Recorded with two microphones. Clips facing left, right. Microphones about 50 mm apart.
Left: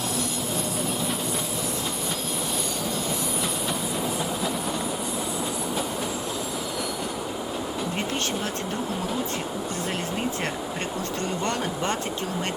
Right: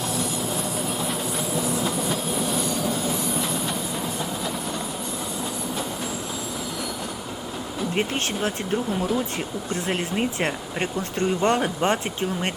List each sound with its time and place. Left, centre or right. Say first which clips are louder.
0.2 s train: right 2 dB; centre
7.9 s speech: right 5 dB; right
9.8 s speech: right 4 dB; right